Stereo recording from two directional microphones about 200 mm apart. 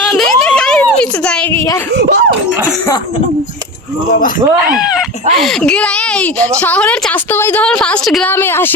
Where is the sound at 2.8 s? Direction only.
20° left (ahead or behind).